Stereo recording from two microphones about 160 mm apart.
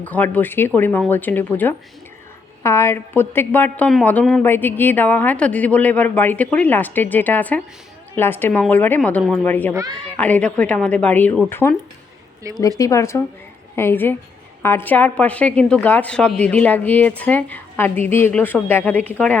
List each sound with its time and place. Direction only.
0.0 s a woman's voice: 10° left (ahead or behind)